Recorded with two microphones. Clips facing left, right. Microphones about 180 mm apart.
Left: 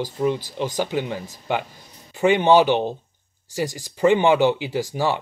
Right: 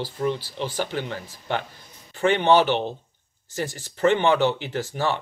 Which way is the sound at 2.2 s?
15° left (ahead or behind).